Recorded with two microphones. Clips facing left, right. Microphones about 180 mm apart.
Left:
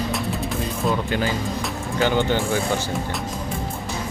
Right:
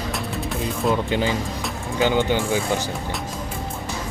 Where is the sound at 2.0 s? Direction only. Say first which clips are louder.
Right 1 dB; 15° right (ahead or behind).